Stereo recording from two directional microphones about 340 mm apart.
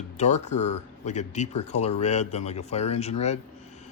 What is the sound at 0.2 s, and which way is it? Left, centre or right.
Speech, centre.